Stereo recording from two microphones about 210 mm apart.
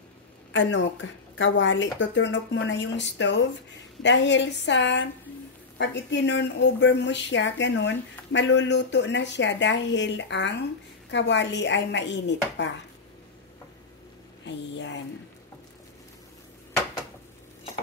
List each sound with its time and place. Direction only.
0.5 s speech: 60° left (ahead or behind)
14.4 s speech: 60° left (ahead or behind)